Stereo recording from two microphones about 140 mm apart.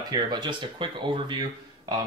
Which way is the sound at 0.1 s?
35° right (ahead or behind).